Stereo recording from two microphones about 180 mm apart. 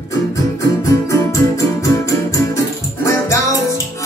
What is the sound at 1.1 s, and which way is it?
Music, 15° left (ahead or behind).